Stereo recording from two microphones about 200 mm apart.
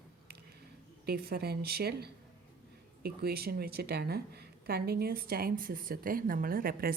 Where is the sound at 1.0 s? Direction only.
50° right (ahead or behind).